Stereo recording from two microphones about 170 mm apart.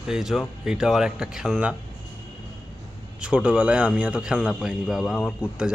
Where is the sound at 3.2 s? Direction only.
5° right (ahead or behind).